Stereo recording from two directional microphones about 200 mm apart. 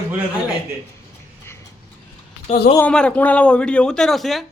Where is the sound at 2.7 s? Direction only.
5° left (ahead or behind).